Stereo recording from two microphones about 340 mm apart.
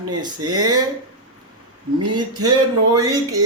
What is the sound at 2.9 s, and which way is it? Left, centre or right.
Speech, centre.